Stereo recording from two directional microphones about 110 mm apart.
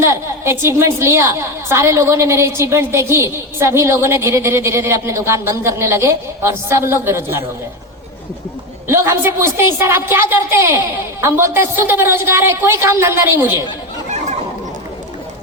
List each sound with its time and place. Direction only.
0.0 s a woman's voice: 25° right (ahead or behind)
8.9 s a woman's voice: 25° right (ahead or behind)